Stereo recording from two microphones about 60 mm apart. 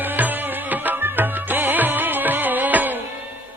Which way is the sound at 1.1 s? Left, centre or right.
Right.